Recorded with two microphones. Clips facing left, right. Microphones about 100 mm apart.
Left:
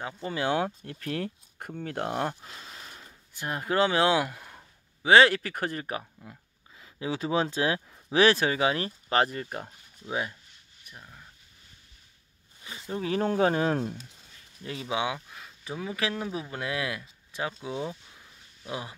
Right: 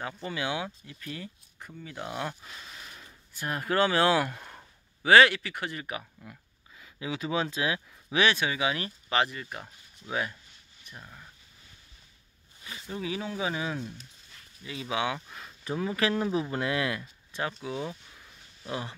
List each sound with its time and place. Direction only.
0.2 s speech: 35° left (ahead or behind)
2.4 s speech: 30° left (ahead or behind)
4.3 s a sound: 5° left (ahead or behind)
5.0 s speech: 25° left (ahead or behind)
5.3 s speech: 40° left (ahead or behind)
10.0 s speech: 15° left (ahead or behind)
11.0 s speech: centre (ahead or behind)
12.6 s a sound: 20° left (ahead or behind)
13.0 s speech: 50° left (ahead or behind)
14.8 s speech: 20° left (ahead or behind)
15.1 s speech: centre (ahead or behind)
17.3 s a sound: 10° left (ahead or behind)
17.6 s speech: 15° left (ahead or behind)